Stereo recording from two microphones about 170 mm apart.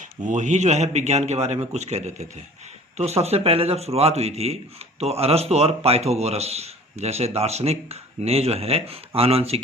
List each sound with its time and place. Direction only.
0.3 s a man's voice: 45° right (ahead or behind)